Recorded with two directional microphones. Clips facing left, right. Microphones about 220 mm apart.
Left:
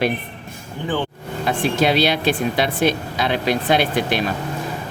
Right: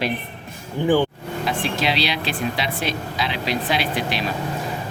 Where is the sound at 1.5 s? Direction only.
50° left (ahead or behind).